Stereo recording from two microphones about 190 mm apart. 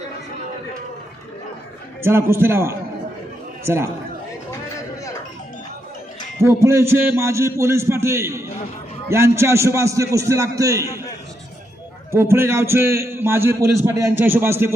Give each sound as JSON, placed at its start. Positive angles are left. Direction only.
{"t": 2.0, "sound": "a man's voice", "side_deg": -10}
{"t": 6.6, "sound": "a man's voice", "side_deg": -15}
{"t": 12.1, "sound": "a man's voice", "side_deg": -15}